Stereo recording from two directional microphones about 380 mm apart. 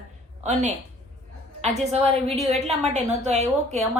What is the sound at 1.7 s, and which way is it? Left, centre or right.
Speech, centre.